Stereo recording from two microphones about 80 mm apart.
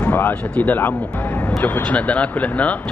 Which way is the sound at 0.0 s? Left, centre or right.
Left.